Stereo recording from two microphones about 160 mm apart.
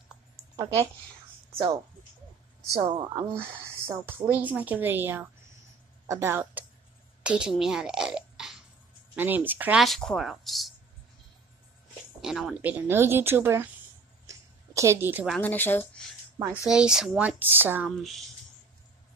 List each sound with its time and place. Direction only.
0.4 s a sound: 20° right (ahead or behind)
2.8 s a woman's voice: 30° right (ahead or behind)
3.3 s a woman's voice: 15° right (ahead or behind)
7.2 s burping: 5° right (ahead or behind)
9.1 s speech: 10° right (ahead or behind)
12.2 s a woman's voice: 5° right (ahead or behind)
14.2 s a sound: 20° right (ahead or behind)
15.4 s speech: 10° left (ahead or behind)
16.6 s speech: 5° right (ahead or behind)
17.4 s a woman's voice: 10° right (ahead or behind)
17.8 s speech: centre (ahead or behind)